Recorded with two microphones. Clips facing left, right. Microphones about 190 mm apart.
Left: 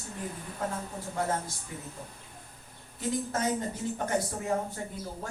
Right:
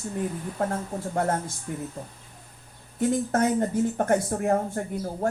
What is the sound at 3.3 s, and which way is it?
A woman's voice, 55° right (ahead or behind).